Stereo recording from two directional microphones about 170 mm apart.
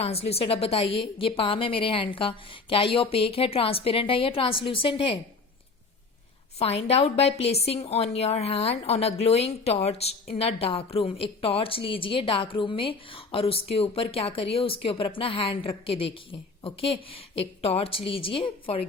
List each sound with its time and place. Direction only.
0.0 s a woman's voice: 35° left (ahead or behind)
6.6 s a woman's voice: 35° left (ahead or behind)